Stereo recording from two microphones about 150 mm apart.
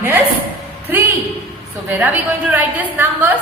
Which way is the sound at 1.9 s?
10° right (ahead or behind).